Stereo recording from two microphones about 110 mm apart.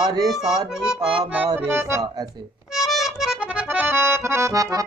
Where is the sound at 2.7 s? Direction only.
Centre (ahead or behind).